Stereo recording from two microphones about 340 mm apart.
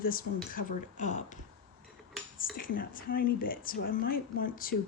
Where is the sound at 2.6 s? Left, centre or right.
Left.